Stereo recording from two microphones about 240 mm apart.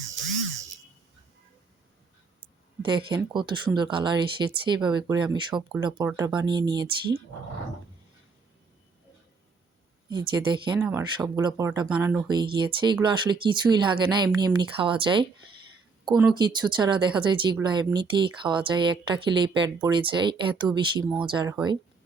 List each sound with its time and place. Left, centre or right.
2.8 s speech: centre
10.1 s speech: centre
10.8 s speech: centre
16.3 s speech: centre